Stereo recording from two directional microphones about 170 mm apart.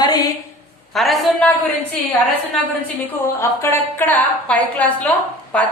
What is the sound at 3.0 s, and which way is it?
A woman's voice, 15° left (ahead or behind).